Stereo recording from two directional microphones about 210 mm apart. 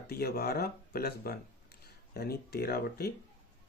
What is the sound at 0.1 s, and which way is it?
Speech, 45° left (ahead or behind).